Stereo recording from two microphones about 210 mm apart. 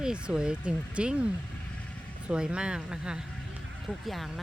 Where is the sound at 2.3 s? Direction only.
5° right (ahead or behind).